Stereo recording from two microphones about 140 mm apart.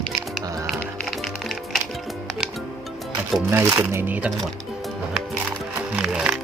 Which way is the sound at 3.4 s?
15° right (ahead or behind).